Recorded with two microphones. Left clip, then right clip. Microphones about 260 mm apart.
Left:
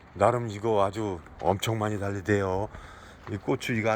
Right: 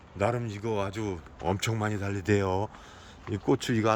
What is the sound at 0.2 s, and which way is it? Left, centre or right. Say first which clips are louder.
A man's voice: left 5 dB; centre.